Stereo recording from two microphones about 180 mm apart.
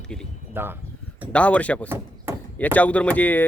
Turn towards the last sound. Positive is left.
turn(degrees=10)  # may be behind; listen again after turning